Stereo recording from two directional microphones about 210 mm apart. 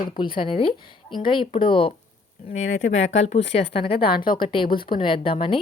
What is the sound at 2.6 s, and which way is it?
Speech, 70° left (ahead or behind).